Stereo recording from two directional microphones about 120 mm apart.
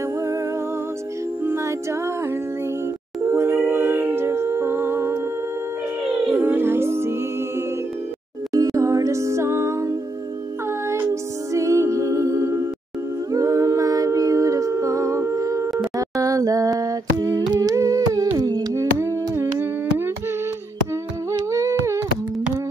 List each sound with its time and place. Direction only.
1.4 s music: 20° right (ahead or behind)
3.3 s humming: 20° right (ahead or behind)
6.3 s music: 20° right (ahead or behind)
11.5 s music: 25° right (ahead or behind)
13.3 s a capella: 25° right (ahead or behind)
16.0 s a sound: 30° right (ahead or behind)
17.6 s humming: 30° right (ahead or behind)
21.5 s a sound: 25° right (ahead or behind)